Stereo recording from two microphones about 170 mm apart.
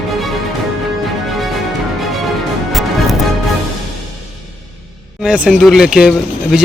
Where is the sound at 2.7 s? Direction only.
Centre (ahead or behind).